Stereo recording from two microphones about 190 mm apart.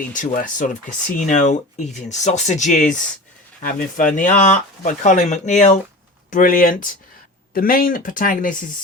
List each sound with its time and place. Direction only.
0.1 s speech: 45° left (ahead or behind)